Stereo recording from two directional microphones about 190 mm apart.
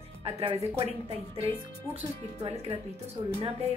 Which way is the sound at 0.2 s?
30° right (ahead or behind).